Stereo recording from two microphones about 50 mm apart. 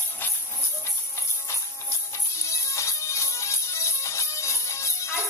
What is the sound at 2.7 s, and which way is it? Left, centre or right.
Music, left.